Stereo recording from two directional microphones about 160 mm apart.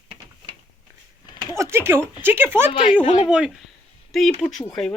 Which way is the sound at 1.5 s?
15° right (ahead or behind).